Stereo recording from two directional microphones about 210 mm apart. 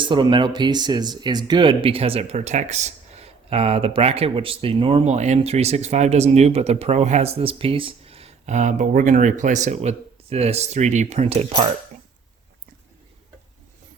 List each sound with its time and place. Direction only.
0.0 s speech: 20° right (ahead or behind)